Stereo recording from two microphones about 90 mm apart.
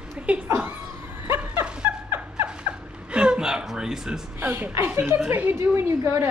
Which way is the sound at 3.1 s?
10° right (ahead or behind).